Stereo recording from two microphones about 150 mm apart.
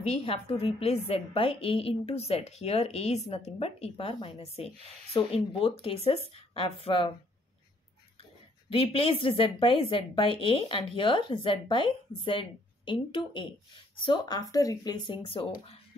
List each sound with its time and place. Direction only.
0.0 s a woman's voice: 45° left (ahead or behind)
8.7 s a woman's voice: 40° left (ahead or behind)